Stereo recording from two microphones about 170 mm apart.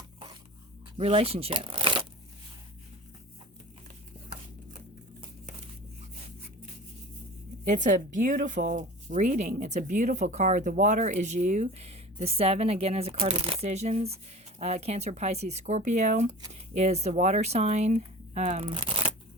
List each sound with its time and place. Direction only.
0.9 s speech: 35° right (ahead or behind)
7.7 s speech: 45° right (ahead or behind)